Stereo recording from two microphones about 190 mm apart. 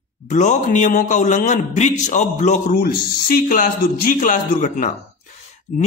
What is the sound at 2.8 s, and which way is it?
A man's voice, 50° left (ahead or behind).